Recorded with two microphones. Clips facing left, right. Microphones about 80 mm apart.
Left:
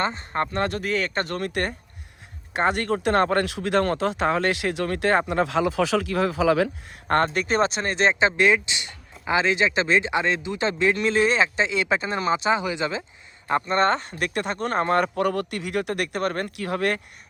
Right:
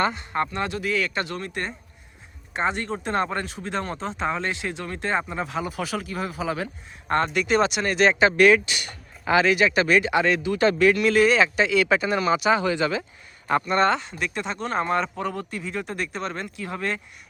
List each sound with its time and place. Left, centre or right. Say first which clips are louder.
0.0 s speech: right 1 dB; left
0.5 s speech: left 1 dB; left
7.1 s speech: even; left
13.7 s speech: even; left